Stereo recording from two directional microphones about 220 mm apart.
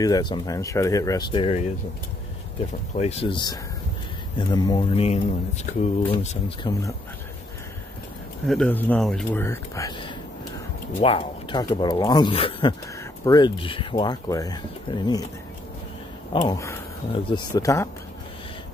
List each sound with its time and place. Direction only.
0.0 s speech: 20° left (ahead or behind)
3.0 s speech: 25° left (ahead or behind)
8.5 s speech: 5° left (ahead or behind)
16.3 s speech: 15° left (ahead or behind)